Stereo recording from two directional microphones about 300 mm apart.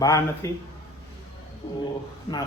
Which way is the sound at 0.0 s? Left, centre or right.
Centre.